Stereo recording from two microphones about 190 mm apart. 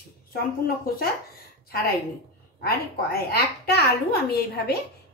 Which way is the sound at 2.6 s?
55° left (ahead or behind).